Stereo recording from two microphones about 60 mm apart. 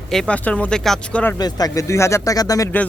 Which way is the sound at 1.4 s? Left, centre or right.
Left.